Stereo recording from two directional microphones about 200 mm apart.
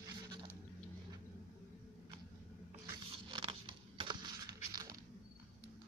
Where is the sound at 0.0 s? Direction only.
20° right (ahead or behind).